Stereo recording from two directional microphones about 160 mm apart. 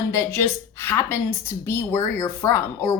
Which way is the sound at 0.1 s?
15° left (ahead or behind).